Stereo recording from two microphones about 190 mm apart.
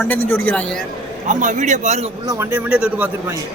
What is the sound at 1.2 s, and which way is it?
Speech, 40° right (ahead or behind).